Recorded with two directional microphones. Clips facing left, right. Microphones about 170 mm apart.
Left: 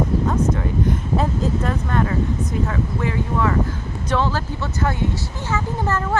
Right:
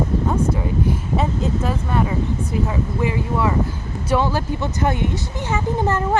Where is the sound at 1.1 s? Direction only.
5° right (ahead or behind).